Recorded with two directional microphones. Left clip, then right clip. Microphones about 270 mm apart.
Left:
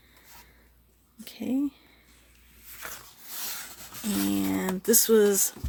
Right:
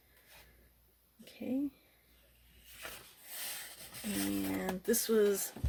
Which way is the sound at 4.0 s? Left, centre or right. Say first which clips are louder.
Left 8 dB; centre.